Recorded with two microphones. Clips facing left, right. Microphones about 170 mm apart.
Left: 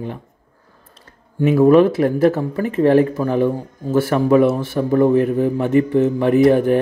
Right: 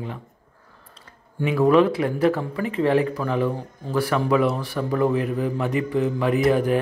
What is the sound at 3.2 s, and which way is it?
Speech, 20° left (ahead or behind).